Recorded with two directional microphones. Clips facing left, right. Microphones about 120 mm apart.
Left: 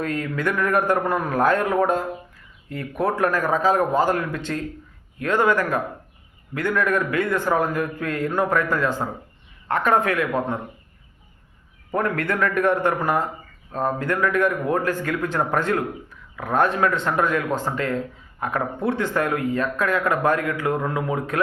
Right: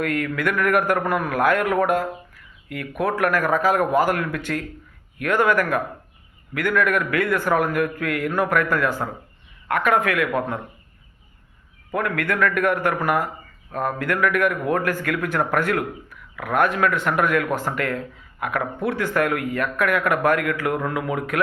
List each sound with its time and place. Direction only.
0.0 s a man's voice: 25° left (ahead or behind)
11.9 s a man's voice: 30° left (ahead or behind)